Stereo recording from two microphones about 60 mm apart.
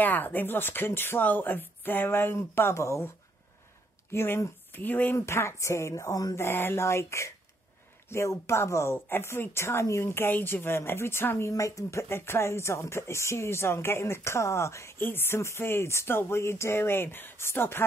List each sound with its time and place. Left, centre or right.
0.0 s speech: left
4.1 s speech: left
4.7 s speech: left
5.1 s speech: left
6.3 s speech: left
8.9 s speech: left
11.5 s speech: left
15.0 s speech: left